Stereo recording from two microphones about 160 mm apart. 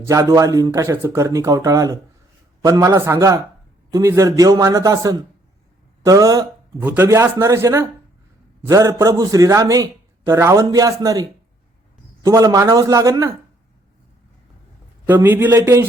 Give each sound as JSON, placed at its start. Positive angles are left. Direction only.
{"t": 0.0, "sound": "a man's voice", "side_deg": -20}
{"t": 15.0, "sound": "speech", "side_deg": -10}